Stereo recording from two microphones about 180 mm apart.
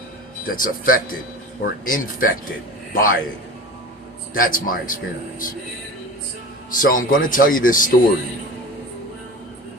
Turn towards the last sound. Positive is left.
turn(degrees=50)  # may be behind; listen again after turning